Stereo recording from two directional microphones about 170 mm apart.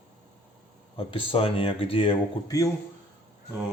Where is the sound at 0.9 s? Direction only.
30° left (ahead or behind).